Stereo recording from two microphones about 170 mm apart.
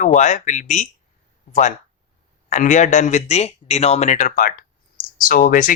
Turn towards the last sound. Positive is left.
turn(degrees=55)  # may be behind; listen again after turning